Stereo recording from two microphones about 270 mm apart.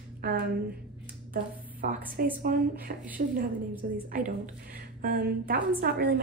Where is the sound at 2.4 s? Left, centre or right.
Right.